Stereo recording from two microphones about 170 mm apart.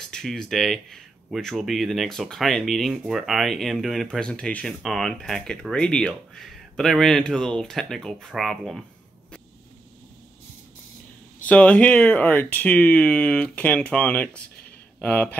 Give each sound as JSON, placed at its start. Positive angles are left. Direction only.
{"t": 0.1, "sound": "speech", "side_deg": 5}
{"t": 11.4, "sound": "speech", "side_deg": 10}